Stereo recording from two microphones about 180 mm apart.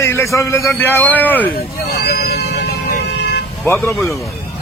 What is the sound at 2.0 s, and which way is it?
Speech, 60° left (ahead or behind).